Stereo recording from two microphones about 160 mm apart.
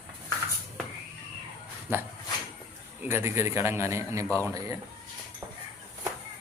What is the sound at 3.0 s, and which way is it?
A man's voice, 15° right (ahead or behind).